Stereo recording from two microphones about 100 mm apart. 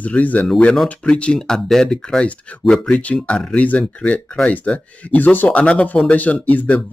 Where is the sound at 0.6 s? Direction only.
5° left (ahead or behind).